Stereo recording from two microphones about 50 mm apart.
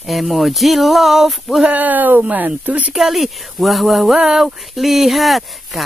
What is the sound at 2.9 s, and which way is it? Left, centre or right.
Speech, centre.